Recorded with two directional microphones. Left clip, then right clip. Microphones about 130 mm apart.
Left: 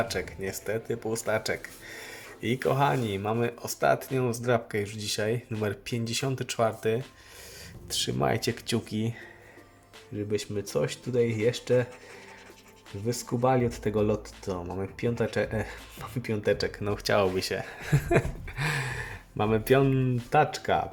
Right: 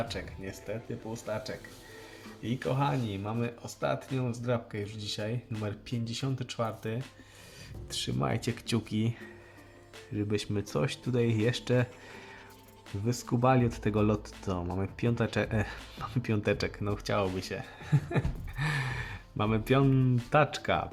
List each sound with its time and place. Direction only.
0.1 s speech: 35° left (ahead or behind)
1.1 s speech: 55° left (ahead or behind)
2.4 s speech: 35° left (ahead or behind)
7.9 s speech: 5° left (ahead or behind)
10.3 s speech: 20° right (ahead or behind)
13.1 s speech: 15° right (ahead or behind)
16.8 s speech: 5° left (ahead or behind)
17.7 s a sound: 30° left (ahead or behind)
18.6 s speech: 5° left (ahead or behind)